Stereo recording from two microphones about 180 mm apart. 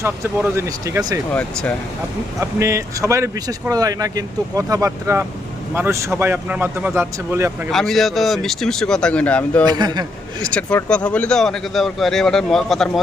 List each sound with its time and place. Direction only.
0.0 s speech: 15° right (ahead or behind)
1.3 s speech: 10° left (ahead or behind)
2.4 s speech: 15° right (ahead or behind)
7.7 s speech: centre (ahead or behind)
9.6 s speech: 25° right (ahead or behind)
10.4 s speech: 5° left (ahead or behind)